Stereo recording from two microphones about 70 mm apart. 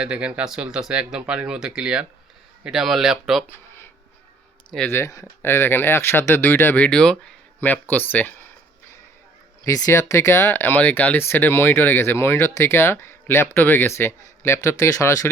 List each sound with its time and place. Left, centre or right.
0.0 s speech: centre
3.4 s a sound: left
4.7 s speech: centre
5.4 s speech: left
6.7 s speech: centre
7.6 s speech: left
9.6 s speech: left